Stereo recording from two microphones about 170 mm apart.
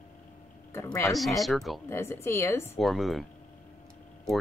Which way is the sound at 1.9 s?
15° left (ahead or behind).